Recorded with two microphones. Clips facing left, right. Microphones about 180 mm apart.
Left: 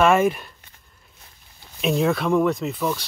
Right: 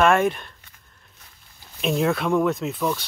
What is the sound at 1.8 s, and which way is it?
Speech, centre (ahead or behind).